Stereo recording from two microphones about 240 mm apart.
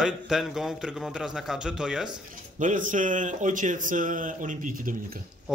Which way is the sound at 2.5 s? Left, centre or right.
Right.